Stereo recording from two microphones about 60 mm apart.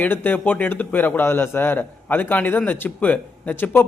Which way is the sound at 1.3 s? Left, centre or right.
Left.